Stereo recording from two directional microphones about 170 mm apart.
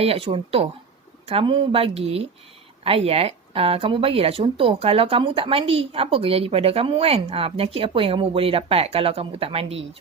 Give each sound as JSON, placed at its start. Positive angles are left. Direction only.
{"t": 0.0, "sound": "speech", "side_deg": -35}